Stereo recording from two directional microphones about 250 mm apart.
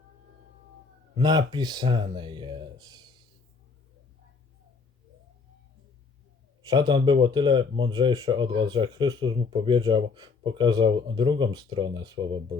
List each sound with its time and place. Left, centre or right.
1.1 s speech: centre
6.7 s speech: centre